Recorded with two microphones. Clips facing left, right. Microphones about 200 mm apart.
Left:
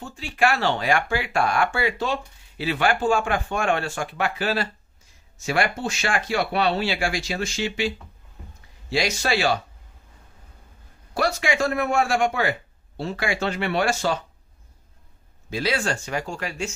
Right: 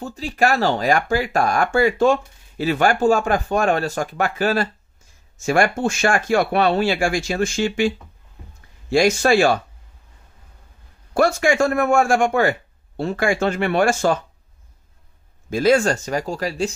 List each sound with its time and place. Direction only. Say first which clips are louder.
0.0 s speech: right 3 dB; 40° right (ahead or behind)
8.9 s speech: right 8 dB; 50° right (ahead or behind)
11.1 s speech: right 6 dB; 50° right (ahead or behind)
15.5 s speech: right 9 dB; 45° right (ahead or behind)